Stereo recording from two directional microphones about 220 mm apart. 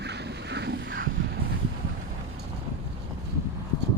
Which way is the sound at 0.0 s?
50° right (ahead or behind).